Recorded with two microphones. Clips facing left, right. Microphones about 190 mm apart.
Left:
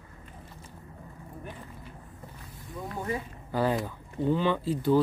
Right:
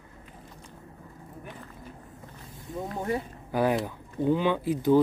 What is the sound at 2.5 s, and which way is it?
Vehicle, 20° right (ahead or behind).